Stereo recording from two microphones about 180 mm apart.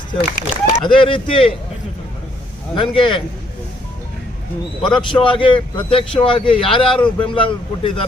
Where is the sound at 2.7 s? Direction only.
25° left (ahead or behind).